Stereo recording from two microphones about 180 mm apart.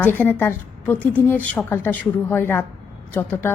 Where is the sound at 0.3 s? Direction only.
10° left (ahead or behind).